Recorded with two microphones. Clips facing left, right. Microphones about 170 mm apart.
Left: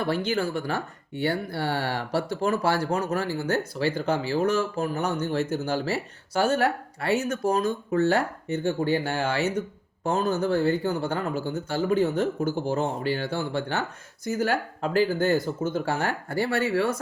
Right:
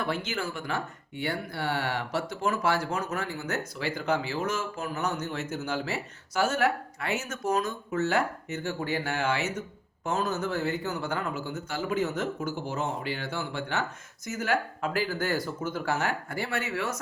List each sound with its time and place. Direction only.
0.0 s speech: 30° left (ahead or behind)